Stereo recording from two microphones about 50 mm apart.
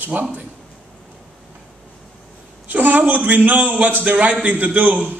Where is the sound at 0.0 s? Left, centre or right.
Right.